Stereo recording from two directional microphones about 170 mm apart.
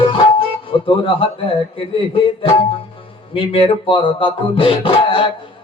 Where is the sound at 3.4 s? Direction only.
30° left (ahead or behind).